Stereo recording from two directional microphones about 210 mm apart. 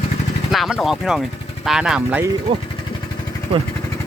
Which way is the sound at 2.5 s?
25° right (ahead or behind).